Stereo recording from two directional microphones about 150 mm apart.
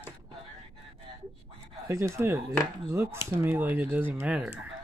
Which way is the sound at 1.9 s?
20° right (ahead or behind).